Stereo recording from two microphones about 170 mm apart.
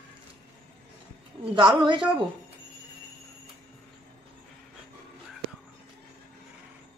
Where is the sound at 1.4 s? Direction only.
30° right (ahead or behind).